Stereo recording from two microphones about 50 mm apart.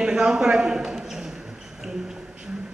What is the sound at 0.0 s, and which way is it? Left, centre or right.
A man's voice, centre.